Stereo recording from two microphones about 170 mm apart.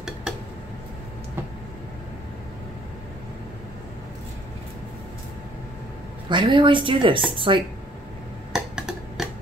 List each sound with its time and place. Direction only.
6.2 s a woman's voice: 30° right (ahead or behind)
8.5 s tick-tock: 5° right (ahead or behind)